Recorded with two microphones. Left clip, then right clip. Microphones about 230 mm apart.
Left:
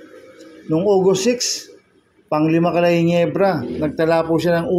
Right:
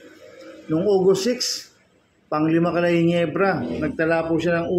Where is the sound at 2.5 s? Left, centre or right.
Left.